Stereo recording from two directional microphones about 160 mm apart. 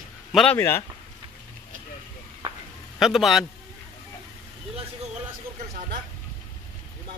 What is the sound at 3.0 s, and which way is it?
Speech, centre (ahead or behind).